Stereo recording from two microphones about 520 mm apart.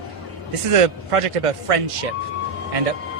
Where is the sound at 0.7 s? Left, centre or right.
Right.